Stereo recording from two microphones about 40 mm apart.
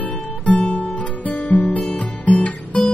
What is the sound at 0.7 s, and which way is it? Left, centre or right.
Guitar, left.